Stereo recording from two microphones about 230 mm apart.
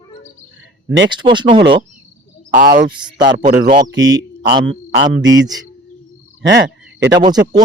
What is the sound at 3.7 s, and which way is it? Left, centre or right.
Speech, centre.